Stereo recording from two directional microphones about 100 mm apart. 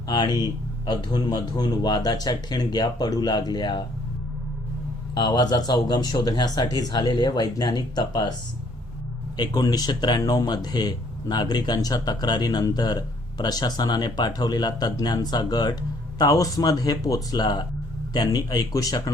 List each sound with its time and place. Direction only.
0.1 s speech: 45° left (ahead or behind)
5.1 s speech: 45° left (ahead or behind)
9.4 s speech: 40° left (ahead or behind)